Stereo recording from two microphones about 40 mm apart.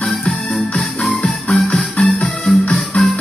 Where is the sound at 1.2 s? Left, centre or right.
Left.